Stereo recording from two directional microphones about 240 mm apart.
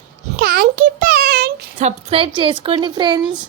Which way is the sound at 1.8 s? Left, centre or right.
Right.